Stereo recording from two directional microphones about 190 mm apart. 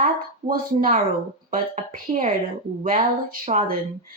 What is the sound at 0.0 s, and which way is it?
Speech, 50° right (ahead or behind).